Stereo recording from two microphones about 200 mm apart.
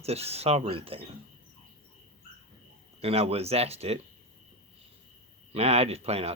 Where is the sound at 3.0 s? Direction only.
30° right (ahead or behind).